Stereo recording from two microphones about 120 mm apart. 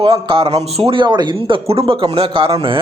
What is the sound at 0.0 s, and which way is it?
Speech, 50° right (ahead or behind).